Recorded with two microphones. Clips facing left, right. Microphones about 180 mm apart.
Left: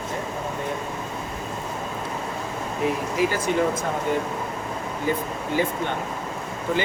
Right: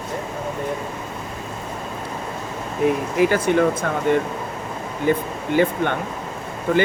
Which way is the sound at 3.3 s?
60° right (ahead or behind).